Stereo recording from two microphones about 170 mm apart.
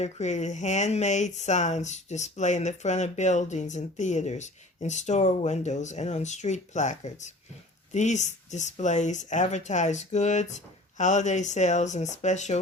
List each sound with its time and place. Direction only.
0.0 s speech: 40° left (ahead or behind)